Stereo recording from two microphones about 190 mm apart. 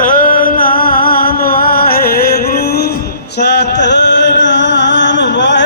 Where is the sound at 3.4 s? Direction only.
60° left (ahead or behind).